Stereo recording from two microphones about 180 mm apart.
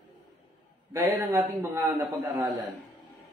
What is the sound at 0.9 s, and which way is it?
Speech, 15° right (ahead or behind).